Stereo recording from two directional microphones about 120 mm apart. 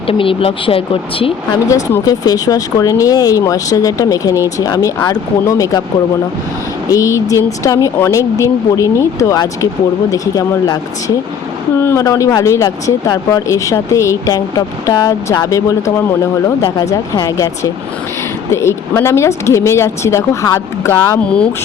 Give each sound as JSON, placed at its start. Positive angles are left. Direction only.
{"t": 0.1, "sound": "speech", "side_deg": 50}
{"t": 1.7, "sound": "speech", "side_deg": 30}
{"t": 6.9, "sound": "speech", "side_deg": 25}
{"t": 11.8, "sound": "speech", "side_deg": 20}
{"t": 16.8, "sound": "speech", "side_deg": 25}
{"t": 21.2, "sound": "speech", "side_deg": 10}